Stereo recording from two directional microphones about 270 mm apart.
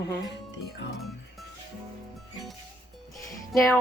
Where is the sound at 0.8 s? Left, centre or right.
Left.